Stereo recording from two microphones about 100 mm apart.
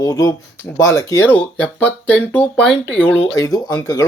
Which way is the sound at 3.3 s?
40° left (ahead or behind).